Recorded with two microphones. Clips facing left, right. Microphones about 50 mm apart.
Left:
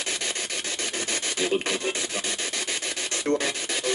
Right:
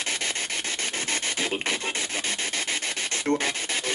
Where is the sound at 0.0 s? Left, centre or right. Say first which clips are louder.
Right 1 dB; right.